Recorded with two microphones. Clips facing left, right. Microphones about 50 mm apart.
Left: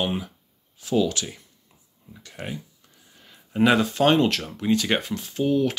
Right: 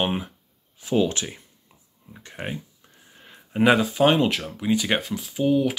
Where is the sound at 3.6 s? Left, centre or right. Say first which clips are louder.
Right 1 dB; centre.